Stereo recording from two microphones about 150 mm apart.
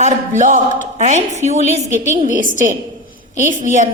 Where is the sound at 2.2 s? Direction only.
65° right (ahead or behind).